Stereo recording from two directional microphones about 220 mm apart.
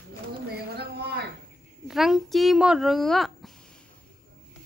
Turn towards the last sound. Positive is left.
turn(degrees=0)  # may be behind; listen again after turning